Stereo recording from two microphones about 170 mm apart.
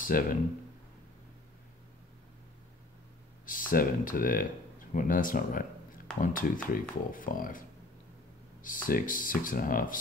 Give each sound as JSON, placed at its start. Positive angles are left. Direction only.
{"t": 0.0, "sound": "speech", "side_deg": 55}
{"t": 3.4, "sound": "speech", "side_deg": 55}
{"t": 8.6, "sound": "speech", "side_deg": 55}